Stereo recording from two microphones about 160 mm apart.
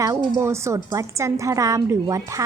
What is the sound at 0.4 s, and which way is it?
A woman's voice, 15° right (ahead or behind).